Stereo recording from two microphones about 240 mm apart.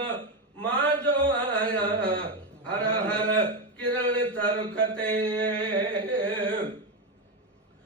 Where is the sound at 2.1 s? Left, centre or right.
Centre.